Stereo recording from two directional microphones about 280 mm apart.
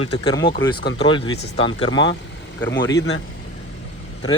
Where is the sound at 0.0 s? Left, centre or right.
Centre.